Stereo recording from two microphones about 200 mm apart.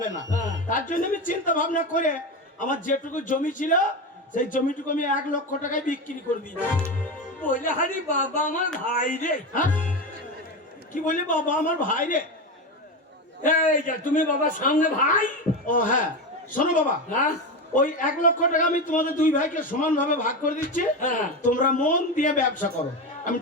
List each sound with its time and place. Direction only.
0.0 s a man's voice: 40° left (ahead or behind)
7.4 s a man's voice: 40° left (ahead or behind)
10.9 s a man's voice: 40° left (ahead or behind)
13.4 s a man's voice: 40° left (ahead or behind)